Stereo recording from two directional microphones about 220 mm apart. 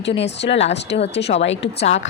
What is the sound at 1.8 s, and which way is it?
Speech, 30° left (ahead or behind).